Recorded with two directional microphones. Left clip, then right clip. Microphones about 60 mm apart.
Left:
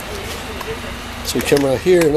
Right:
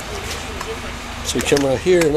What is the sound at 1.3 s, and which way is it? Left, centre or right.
Speech, centre.